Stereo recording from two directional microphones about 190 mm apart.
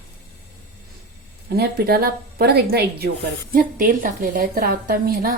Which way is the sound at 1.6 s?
55° right (ahead or behind).